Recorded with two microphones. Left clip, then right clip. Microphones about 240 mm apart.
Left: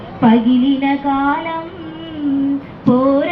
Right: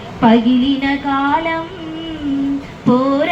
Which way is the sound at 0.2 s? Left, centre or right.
Right.